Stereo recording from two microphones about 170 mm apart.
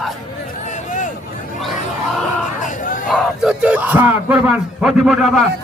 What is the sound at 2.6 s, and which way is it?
Crowd, 50° left (ahead or behind).